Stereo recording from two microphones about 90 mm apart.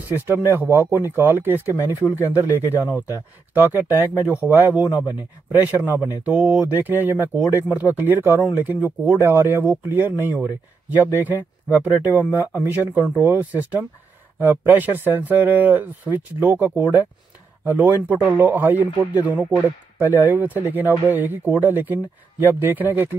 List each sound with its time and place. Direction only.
0.1 s speech: 25° right (ahead or behind)